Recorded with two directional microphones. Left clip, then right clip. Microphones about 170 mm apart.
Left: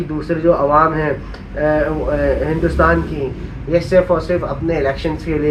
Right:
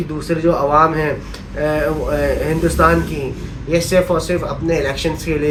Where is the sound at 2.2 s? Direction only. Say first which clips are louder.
Left 1 dB; 25° right (ahead or behind).